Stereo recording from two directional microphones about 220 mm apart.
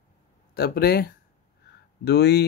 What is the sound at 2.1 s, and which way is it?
Speech, 50° left (ahead or behind).